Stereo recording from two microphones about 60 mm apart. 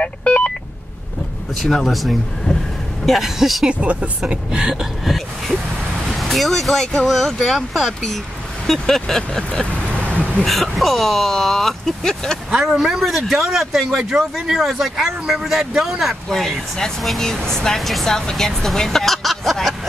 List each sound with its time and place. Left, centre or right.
0.0 s telephone dialing: left
1.6 s speech: centre
3.6 s speech: right; by 9.4 s centre
9.4 s vehicle: centre
10.4 s speech: centre
12.4 s speech: centre
16.3 s speech: centre